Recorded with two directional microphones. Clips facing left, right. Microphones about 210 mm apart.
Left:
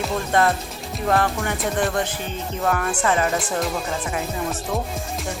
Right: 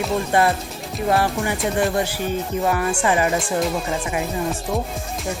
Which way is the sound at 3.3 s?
Centre (ahead or behind).